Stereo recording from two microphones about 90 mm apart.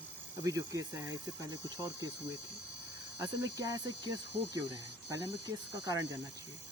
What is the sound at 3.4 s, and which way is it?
Speech, 45° right (ahead or behind).